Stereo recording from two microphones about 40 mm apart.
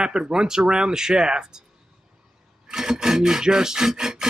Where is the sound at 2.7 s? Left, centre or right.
Centre.